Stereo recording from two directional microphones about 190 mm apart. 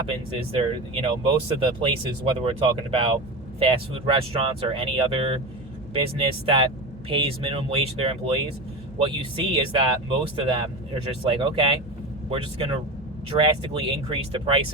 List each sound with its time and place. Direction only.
0.3 s speech: 30° right (ahead or behind)